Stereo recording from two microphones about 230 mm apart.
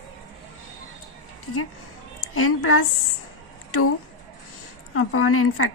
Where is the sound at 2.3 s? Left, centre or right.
Left.